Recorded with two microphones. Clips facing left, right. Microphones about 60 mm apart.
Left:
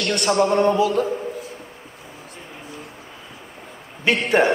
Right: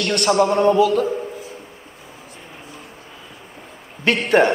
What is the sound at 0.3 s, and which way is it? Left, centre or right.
Speech, centre.